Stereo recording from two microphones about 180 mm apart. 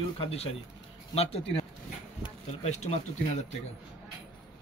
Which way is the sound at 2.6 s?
40° left (ahead or behind).